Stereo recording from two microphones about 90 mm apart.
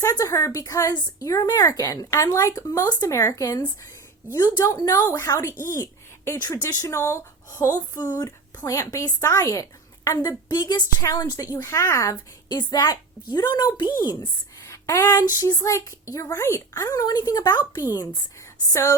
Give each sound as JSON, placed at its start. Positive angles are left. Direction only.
{"t": 0.0, "sound": "speech", "side_deg": 40}
{"t": 4.6, "sound": "a woman's voice", "side_deg": 40}
{"t": 5.0, "sound": "a woman's voice", "side_deg": 25}
{"t": 12.5, "sound": "a woman's voice", "side_deg": 45}
{"t": 14.6, "sound": "a woman's voice", "side_deg": 35}
{"t": 18.7, "sound": "speech", "side_deg": 30}